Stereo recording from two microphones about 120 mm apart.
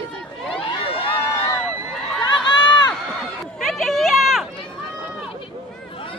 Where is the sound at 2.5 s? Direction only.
40° left (ahead or behind).